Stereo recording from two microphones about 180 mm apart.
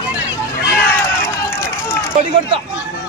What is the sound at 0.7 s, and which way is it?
Run, 15° left (ahead or behind).